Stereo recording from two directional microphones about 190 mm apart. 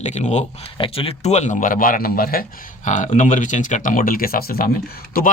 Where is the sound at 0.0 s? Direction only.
35° left (ahead or behind).